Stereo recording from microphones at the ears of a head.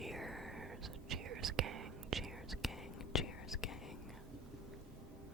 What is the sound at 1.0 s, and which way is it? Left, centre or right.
Whispering, right.